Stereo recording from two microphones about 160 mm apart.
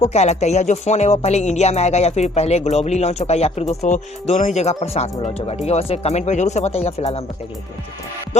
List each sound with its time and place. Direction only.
0.0 s speech: 45° left (ahead or behind)